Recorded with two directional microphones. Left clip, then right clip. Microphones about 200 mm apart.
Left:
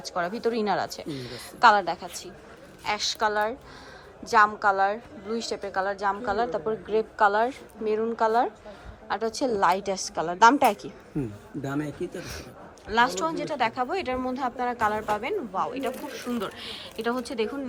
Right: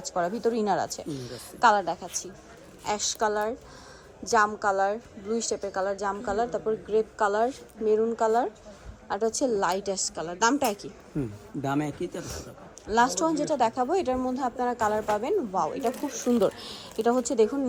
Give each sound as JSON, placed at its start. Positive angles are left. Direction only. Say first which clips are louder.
{"t": 0.0, "sound": "a woman's voice", "louder": "right 1 dB", "side_deg": -15}
{"t": 12.1, "sound": "a woman's voice", "louder": "even", "side_deg": -15}